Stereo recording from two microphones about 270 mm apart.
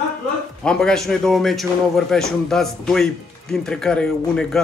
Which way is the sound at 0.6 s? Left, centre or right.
Centre.